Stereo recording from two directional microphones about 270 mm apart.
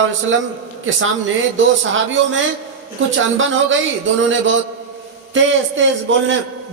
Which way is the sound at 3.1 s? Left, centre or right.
Right.